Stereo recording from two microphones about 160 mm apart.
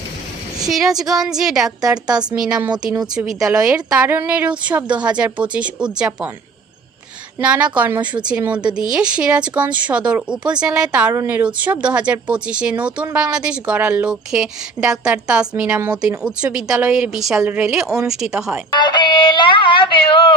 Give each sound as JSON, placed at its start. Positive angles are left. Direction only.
{"t": 0.6, "sound": "a woman's voice", "side_deg": 0}
{"t": 7.3, "sound": "a woman's voice", "side_deg": -10}
{"t": 18.8, "sound": "speech", "side_deg": 30}